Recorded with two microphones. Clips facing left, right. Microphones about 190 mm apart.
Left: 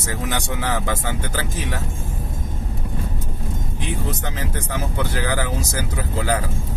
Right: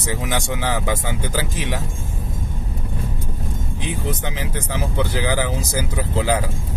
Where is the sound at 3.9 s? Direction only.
15° right (ahead or behind).